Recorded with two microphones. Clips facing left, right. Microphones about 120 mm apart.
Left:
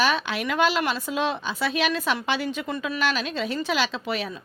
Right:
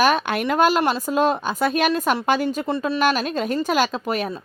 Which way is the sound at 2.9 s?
50° right (ahead or behind).